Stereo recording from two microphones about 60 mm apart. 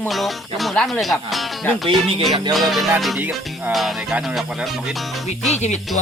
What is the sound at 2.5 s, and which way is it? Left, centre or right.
Music, centre.